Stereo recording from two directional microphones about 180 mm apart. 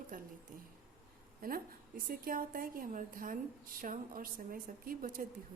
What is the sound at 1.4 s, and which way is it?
A woman's voice, 50° right (ahead or behind).